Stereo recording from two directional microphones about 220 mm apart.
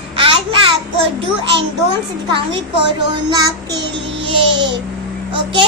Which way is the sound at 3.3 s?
15° right (ahead or behind).